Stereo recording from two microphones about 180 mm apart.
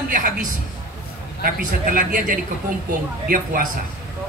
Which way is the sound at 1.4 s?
50° right (ahead or behind).